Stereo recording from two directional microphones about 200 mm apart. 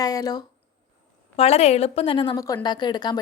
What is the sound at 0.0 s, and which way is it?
Speech, 20° left (ahead or behind).